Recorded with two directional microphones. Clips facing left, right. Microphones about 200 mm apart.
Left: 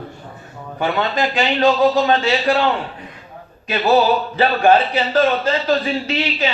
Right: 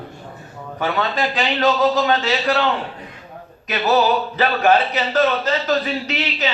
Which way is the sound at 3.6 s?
30° left (ahead or behind).